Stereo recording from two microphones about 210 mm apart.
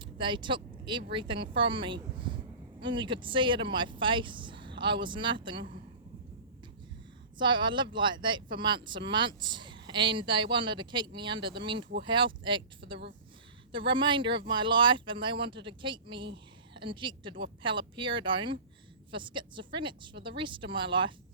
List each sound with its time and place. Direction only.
0.0 s speech: 25° right (ahead or behind)
7.3 s speech: 20° right (ahead or behind)